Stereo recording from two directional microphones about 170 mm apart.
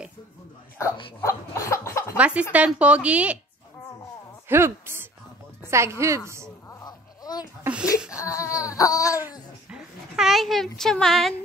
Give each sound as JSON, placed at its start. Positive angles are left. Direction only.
{"t": 1.2, "sound": "cough", "side_deg": 15}
{"t": 2.1, "sound": "a woman's voice", "side_deg": -5}
{"t": 4.5, "sound": "a woman's voice", "side_deg": -15}
{"t": 6.7, "sound": "a sound", "side_deg": 25}
{"t": 8.2, "sound": "baby cry", "side_deg": 20}
{"t": 9.7, "sound": "speech", "side_deg": -5}